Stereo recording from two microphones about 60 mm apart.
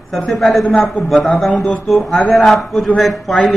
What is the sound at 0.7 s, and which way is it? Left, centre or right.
Speech, left.